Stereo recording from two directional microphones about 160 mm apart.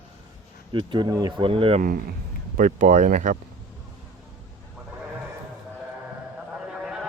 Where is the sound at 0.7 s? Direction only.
30° right (ahead or behind).